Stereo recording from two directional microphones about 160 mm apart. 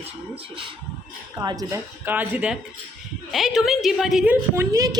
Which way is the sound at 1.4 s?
20° right (ahead or behind).